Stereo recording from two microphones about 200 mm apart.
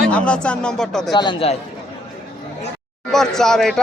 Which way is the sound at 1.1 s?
20° left (ahead or behind).